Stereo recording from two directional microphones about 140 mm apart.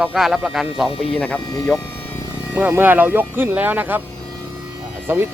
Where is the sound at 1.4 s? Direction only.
30° left (ahead or behind).